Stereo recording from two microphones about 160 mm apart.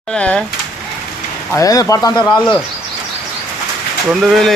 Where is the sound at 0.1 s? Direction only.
5° left (ahead or behind).